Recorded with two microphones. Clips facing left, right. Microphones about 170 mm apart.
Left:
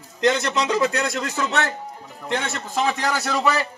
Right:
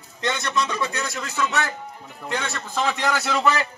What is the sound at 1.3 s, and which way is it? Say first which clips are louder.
Speech: right 3 dB; 25° left (ahead or behind).